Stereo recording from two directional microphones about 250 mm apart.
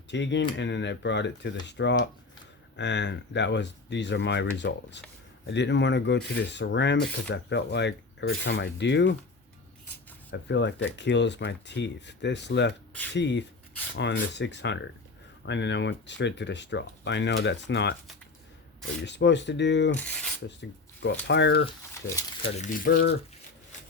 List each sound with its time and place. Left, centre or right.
0.1 s speech: left
10.3 s speech: left
19.0 s speech: left
22.0 s speech: centre
22.5 s speech: left